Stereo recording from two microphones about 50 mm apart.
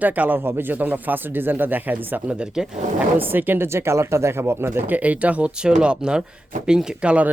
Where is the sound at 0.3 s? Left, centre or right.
Right.